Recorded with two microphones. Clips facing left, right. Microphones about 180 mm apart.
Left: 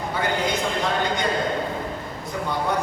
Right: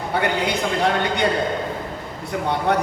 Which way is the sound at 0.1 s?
70° right (ahead or behind).